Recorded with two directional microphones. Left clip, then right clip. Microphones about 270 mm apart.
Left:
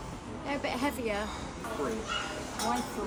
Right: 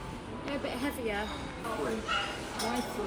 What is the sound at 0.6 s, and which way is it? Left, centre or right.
Speech, left.